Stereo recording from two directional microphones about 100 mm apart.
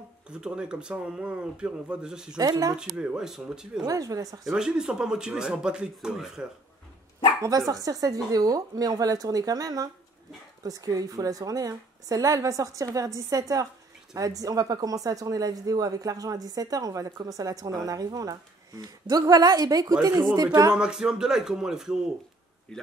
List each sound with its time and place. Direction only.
0.3 s speech: 10° right (ahead or behind)
2.3 s speech: 40° right (ahead or behind)
3.0 s speech: 10° right (ahead or behind)
3.8 s speech: 35° right (ahead or behind)
4.5 s speech: 10° right (ahead or behind)
7.4 s speech: 35° right (ahead or behind)
20.7 s speech: 5° right (ahead or behind)